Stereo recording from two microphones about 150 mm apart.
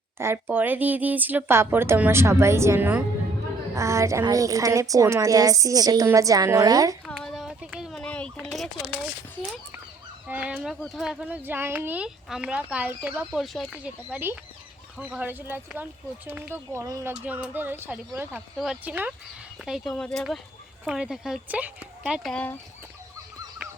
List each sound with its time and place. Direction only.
0.2 s a woman's voice: 15° right (ahead or behind)
7.0 s a sound: centre (ahead or behind)
10.2 s speech: 10° right (ahead or behind)
22.3 s speech: 10° left (ahead or behind)